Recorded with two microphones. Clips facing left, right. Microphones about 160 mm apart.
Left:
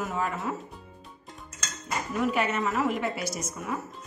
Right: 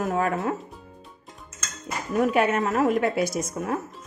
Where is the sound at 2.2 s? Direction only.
55° right (ahead or behind).